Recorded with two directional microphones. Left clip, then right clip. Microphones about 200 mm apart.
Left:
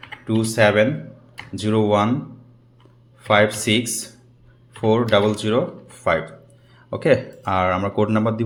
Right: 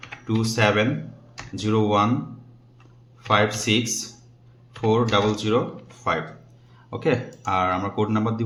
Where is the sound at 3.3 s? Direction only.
25° left (ahead or behind).